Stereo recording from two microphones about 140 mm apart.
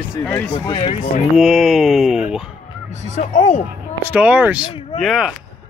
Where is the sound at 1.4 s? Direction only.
Centre (ahead or behind).